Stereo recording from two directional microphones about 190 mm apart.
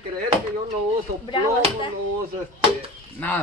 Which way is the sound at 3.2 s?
10° left (ahead or behind).